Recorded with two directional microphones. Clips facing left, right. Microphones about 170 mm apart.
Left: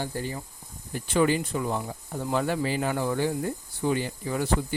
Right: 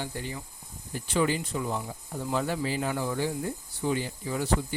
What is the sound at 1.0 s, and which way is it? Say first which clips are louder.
Speech: left 4 dB; 55° left (ahead or behind).